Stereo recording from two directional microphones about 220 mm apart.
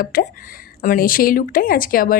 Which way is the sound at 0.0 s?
40° left (ahead or behind).